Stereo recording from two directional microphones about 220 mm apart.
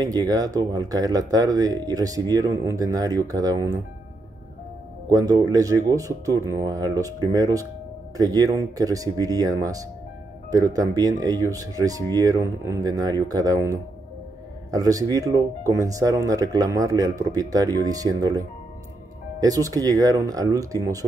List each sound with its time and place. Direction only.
0.0 s speech: 15° right (ahead or behind)
5.1 s speech: 15° right (ahead or behind)
19.4 s speech: 15° right (ahead or behind)